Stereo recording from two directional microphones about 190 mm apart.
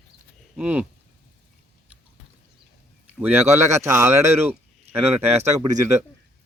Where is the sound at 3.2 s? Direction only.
10° right (ahead or behind).